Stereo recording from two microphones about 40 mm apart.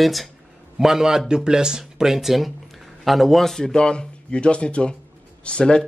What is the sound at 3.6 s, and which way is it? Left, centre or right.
Speech, left.